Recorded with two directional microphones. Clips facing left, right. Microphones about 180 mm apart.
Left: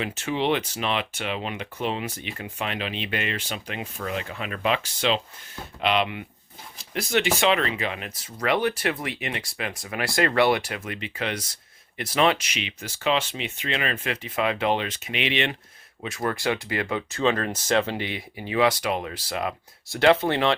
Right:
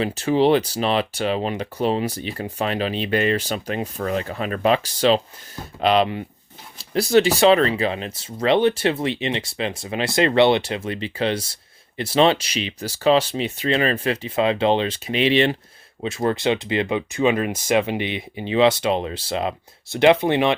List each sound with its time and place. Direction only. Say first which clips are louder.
0.0 s speech: right 8 dB; 35° right (ahead or behind); by 20.6 s 15° right (ahead or behind)